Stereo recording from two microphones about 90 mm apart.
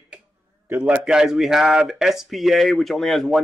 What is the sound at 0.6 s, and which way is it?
Speech, 20° right (ahead or behind).